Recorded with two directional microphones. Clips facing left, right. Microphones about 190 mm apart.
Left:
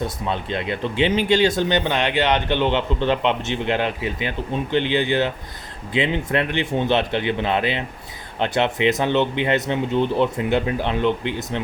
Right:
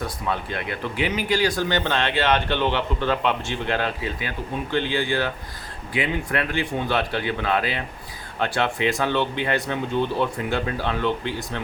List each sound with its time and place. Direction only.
0.0 s speech: 20° left (ahead or behind)